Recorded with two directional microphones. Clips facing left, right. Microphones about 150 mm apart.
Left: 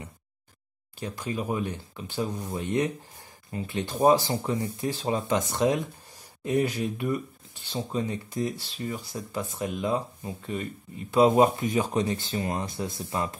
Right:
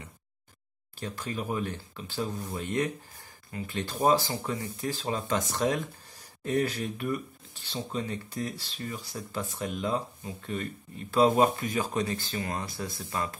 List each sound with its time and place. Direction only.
0.9 s speech: 20° left (ahead or behind)